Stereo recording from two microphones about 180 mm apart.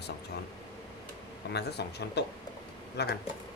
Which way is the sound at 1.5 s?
65° left (ahead or behind).